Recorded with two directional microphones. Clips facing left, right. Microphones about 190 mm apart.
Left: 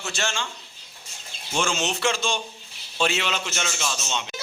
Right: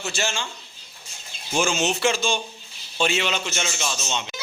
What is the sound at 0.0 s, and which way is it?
Speech, 5° right (ahead or behind).